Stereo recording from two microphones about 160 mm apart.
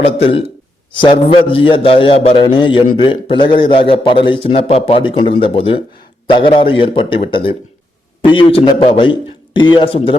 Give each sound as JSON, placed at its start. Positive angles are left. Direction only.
{"t": 0.0, "sound": "a man's voice", "side_deg": 40}